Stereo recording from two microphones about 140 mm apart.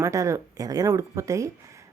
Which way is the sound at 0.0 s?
20° right (ahead or behind).